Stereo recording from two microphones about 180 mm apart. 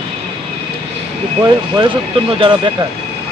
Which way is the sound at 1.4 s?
30° right (ahead or behind).